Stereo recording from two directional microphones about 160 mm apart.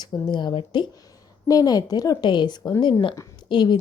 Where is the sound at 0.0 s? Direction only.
30° left (ahead or behind).